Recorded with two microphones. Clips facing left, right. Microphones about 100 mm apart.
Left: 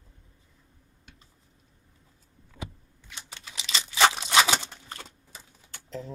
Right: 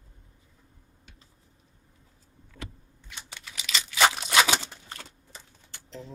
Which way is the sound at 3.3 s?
25° left (ahead or behind).